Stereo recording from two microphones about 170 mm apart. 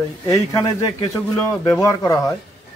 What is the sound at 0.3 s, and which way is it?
A man's voice, 20° left (ahead or behind).